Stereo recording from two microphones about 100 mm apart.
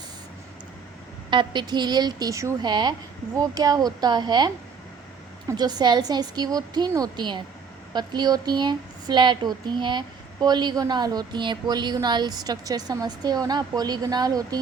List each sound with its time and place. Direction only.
1.3 s speech: 50° right (ahead or behind); by 2.6 s 30° right (ahead or behind)
2.6 s speech: 45° right (ahead or behind)
5.5 s a woman's voice: 45° right (ahead or behind)